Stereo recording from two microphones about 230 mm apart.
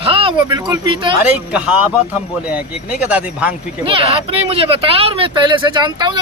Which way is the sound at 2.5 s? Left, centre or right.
Centre.